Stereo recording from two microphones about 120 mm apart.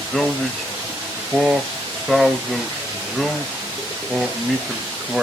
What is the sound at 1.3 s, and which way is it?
Speech, 5° right (ahead or behind).